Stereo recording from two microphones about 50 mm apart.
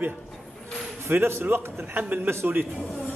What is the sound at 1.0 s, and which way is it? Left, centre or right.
Speech, right.